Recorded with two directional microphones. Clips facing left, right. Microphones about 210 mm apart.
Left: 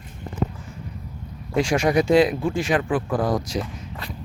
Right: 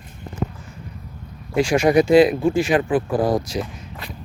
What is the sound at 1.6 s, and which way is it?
Speech, 5° right (ahead or behind).